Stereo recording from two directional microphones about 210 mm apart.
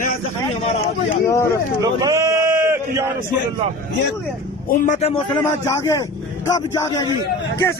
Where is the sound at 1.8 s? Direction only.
15° right (ahead or behind).